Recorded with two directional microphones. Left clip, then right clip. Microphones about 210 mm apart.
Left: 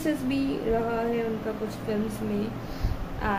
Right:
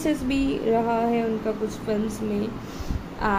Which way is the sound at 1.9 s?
15° right (ahead or behind).